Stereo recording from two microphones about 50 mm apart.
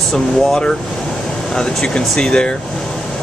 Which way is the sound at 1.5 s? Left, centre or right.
Centre.